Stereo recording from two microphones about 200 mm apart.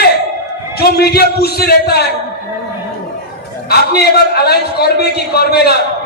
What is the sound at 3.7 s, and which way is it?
A man's voice, 55° left (ahead or behind).